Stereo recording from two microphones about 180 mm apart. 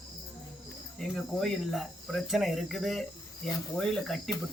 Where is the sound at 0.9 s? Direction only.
5° left (ahead or behind).